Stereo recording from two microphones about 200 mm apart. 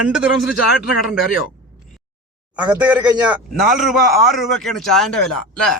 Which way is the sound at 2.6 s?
5° right (ahead or behind).